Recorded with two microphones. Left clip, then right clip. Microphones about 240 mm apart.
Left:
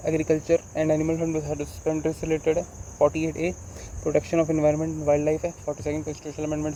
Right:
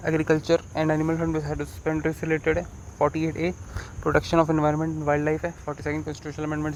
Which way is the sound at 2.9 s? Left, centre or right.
Right.